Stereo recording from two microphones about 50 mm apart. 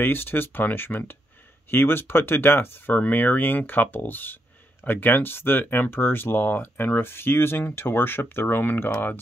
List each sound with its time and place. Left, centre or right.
0.0 s speech: left
2.9 s speech: left